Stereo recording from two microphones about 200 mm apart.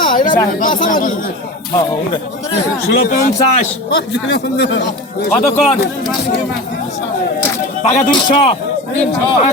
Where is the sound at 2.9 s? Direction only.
50° left (ahead or behind).